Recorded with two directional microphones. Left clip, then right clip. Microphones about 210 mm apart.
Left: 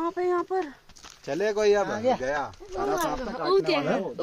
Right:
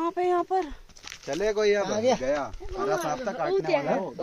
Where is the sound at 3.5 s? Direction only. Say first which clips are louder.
Left 3 dB; 55° left (ahead or behind).